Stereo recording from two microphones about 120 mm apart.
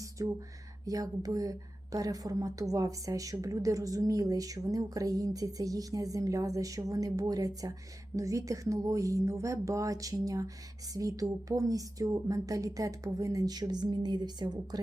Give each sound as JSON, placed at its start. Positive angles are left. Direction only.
{"t": 0.2, "sound": "a woman's voice", "side_deg": -30}